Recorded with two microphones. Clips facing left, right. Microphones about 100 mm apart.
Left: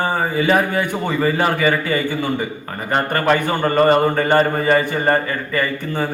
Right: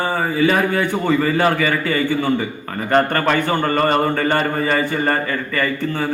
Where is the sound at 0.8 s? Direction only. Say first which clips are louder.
Right 2 dB; 15° left (ahead or behind).